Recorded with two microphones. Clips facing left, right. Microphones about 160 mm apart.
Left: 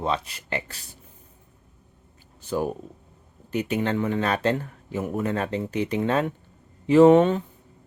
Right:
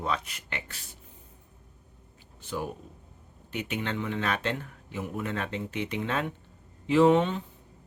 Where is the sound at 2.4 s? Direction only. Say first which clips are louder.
Left 8 dB; 40° left (ahead or behind).